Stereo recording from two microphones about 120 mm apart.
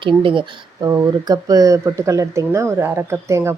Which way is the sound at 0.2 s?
45° right (ahead or behind).